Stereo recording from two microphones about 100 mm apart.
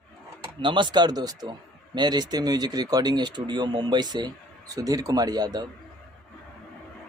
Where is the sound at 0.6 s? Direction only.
55° right (ahead or behind).